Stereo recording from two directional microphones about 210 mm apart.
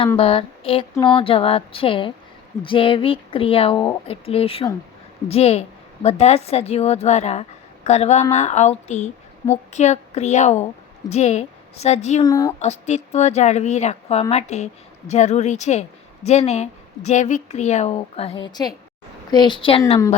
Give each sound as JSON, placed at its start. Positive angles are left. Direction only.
{"t": 0.2, "sound": "a woman's voice", "side_deg": 25}
{"t": 12.2, "sound": "speech", "side_deg": 15}
{"t": 12.5, "sound": "a woman's voice", "side_deg": 35}